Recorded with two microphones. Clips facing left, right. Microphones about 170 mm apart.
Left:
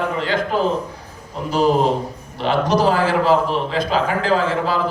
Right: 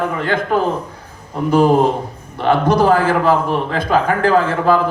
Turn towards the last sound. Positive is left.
turn(degrees=-55)  # may be behind; listen again after turning